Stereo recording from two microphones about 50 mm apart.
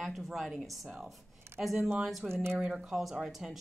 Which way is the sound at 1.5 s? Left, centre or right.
Right.